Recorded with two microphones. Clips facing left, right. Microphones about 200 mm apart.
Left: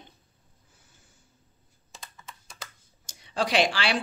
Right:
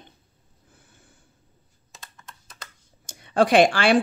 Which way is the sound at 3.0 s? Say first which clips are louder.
Right 9 dB; 55° right (ahead or behind).